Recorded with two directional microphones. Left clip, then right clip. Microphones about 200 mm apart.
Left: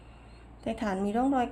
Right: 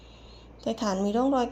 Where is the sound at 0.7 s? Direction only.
15° right (ahead or behind).